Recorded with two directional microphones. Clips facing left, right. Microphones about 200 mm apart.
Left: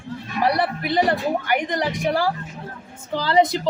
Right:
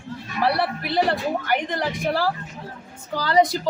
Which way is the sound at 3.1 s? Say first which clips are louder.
Left 1 dB; 25° left (ahead or behind).